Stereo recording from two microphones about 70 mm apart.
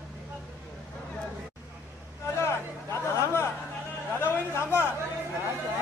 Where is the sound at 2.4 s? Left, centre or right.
Left.